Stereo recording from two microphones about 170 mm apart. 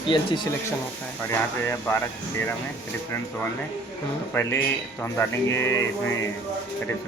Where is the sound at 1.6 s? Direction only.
15° left (ahead or behind).